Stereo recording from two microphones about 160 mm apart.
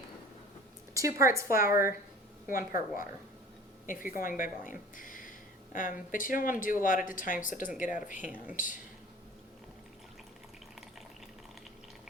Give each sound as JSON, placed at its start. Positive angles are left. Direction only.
{"t": 0.9, "sound": "a woman's voice", "side_deg": -20}
{"t": 1.7, "sound": "speech", "side_deg": 60}
{"t": 4.2, "sound": "speech", "side_deg": 60}
{"t": 8.2, "sound": "speech", "side_deg": -10}
{"t": 8.5, "sound": "speech", "side_deg": 55}